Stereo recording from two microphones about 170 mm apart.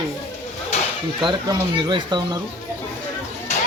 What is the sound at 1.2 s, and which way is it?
Speech, 30° right (ahead or behind).